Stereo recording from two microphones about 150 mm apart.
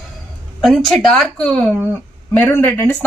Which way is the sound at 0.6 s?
Centre (ahead or behind).